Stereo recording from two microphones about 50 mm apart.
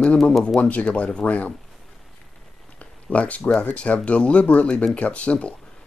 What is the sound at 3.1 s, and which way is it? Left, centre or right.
Speech, left.